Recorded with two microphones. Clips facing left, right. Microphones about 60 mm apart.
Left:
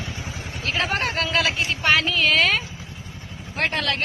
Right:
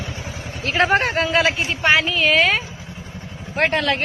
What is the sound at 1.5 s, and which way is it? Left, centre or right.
A woman's voice, centre.